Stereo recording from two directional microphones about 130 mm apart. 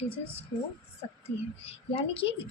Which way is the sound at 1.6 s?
45° left (ahead or behind).